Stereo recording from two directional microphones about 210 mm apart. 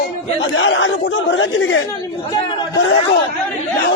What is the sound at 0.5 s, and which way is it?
Speech, 65° left (ahead or behind).